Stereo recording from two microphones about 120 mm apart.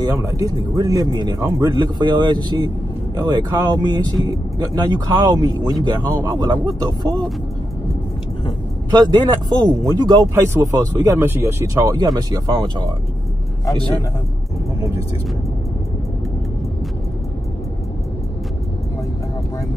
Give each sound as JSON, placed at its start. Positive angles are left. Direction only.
{"t": 0.0, "sound": "speech", "side_deg": -30}
{"t": 8.9, "sound": "speech", "side_deg": -35}
{"t": 10.8, "sound": "speech", "side_deg": -25}
{"t": 12.0, "sound": "speech", "side_deg": -35}